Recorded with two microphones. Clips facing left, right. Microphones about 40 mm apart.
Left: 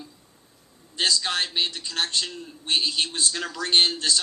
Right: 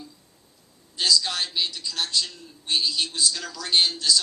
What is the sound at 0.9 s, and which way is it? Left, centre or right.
A man's voice, left.